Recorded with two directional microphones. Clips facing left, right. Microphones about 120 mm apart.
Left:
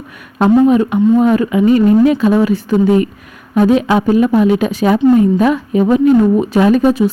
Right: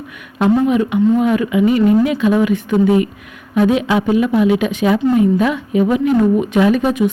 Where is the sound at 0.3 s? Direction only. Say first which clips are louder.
Left 4 dB; 40° left (ahead or behind).